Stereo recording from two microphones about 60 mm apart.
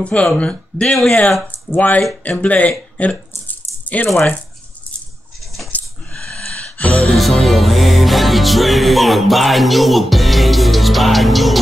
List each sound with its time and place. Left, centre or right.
0.0 s speech: centre
5.7 s dog: left
6.1 s a sound: centre
7.2 s music: centre